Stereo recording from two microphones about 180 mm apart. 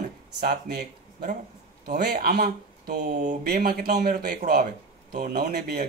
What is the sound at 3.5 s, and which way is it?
A man's voice, 55° right (ahead or behind).